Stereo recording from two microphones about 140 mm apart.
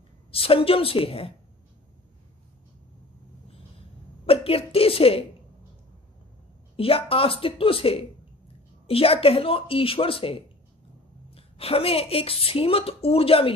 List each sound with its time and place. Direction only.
0.3 s a woman's voice: 40° left (ahead or behind)
4.3 s a sound: 40° left (ahead or behind)
6.8 s a woman's voice: 40° left (ahead or behind)